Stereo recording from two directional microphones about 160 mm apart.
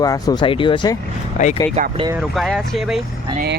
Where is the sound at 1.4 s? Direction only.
50° left (ahead or behind).